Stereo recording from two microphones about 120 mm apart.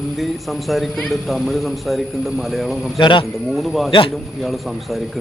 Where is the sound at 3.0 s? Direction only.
40° left (ahead or behind).